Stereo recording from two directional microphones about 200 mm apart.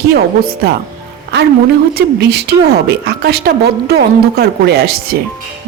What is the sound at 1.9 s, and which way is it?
Speech, 55° right (ahead or behind).